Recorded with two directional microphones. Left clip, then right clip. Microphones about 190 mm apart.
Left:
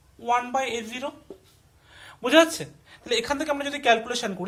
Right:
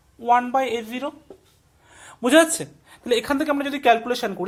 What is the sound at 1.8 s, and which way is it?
A woman's voice, 45° right (ahead or behind).